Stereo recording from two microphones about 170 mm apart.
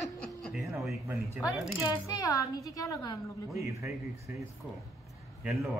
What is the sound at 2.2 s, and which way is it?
A woman's voice, 20° left (ahead or behind).